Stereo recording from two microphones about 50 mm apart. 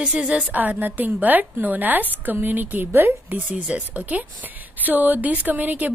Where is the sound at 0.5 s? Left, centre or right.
Right.